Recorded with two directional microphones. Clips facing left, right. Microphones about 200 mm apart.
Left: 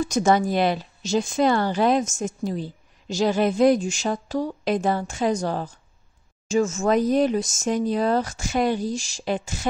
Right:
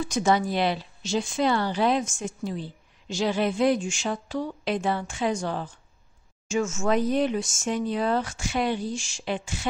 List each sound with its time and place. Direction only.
0.0 s speech: 45° left (ahead or behind)